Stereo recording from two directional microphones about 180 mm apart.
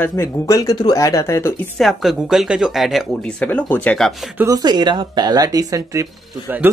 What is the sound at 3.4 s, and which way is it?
Speech, 10° left (ahead or behind).